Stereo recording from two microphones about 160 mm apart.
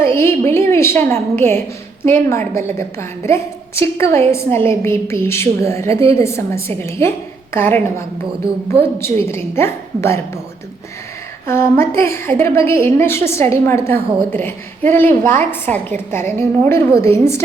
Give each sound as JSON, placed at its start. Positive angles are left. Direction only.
{"t": 0.0, "sound": "a woman's voice", "side_deg": 15}
{"t": 11.4, "sound": "a woman's voice", "side_deg": 15}